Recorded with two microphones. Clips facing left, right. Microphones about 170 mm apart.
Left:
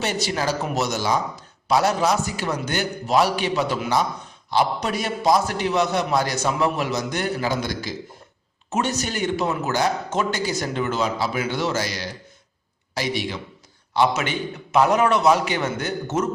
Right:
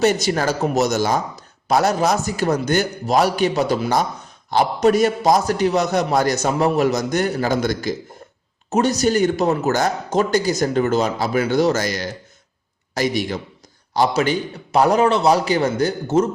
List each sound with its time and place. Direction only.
0.0 s a man's voice: 45° right (ahead or behind)
8.7 s a man's voice: 40° right (ahead or behind)